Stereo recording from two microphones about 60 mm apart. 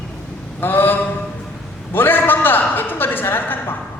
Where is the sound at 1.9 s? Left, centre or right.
Left.